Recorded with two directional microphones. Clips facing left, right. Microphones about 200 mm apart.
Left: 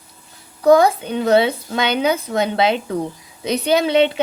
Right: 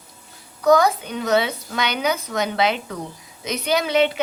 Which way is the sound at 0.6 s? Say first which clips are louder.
Left 4 dB; 30° left (ahead or behind).